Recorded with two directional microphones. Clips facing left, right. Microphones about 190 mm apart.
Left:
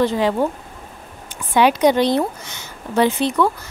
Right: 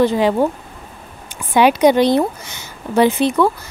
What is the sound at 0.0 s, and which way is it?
Speech, 15° right (ahead or behind).